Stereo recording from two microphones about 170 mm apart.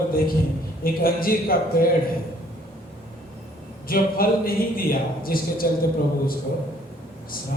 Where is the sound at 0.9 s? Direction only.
60° left (ahead or behind).